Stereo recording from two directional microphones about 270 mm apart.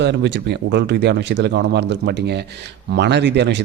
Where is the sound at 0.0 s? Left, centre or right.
Right.